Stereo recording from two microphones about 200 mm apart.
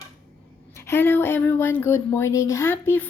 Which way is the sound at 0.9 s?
10° left (ahead or behind).